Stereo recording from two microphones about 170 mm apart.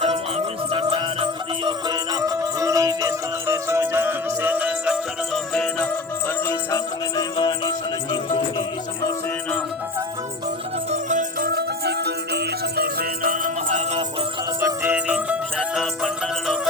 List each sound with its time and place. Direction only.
0.7 s music: 35° right (ahead or behind); by 7.7 s 25° left (ahead or behind)
10.9 s music: 50° right (ahead or behind)
14.6 s jingle bell: 10° right (ahead or behind)